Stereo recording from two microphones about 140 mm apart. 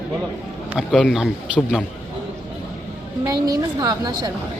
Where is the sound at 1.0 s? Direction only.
Centre (ahead or behind).